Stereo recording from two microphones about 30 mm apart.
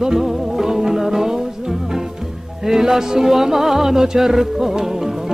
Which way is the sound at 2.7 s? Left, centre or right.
Centre.